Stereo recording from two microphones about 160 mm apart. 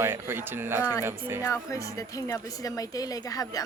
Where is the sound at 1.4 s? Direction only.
20° left (ahead or behind).